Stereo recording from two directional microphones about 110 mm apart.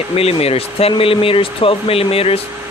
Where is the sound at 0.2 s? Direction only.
65° left (ahead or behind).